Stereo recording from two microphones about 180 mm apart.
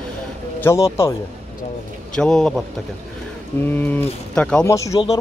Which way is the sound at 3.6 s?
10° left (ahead or behind).